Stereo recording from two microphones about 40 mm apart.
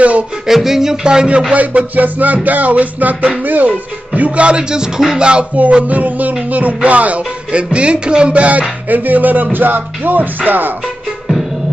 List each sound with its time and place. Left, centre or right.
0.5 s music: centre
1.0 s music: right
1.5 s speech: right
3.6 s music: right
5.6 s speech: right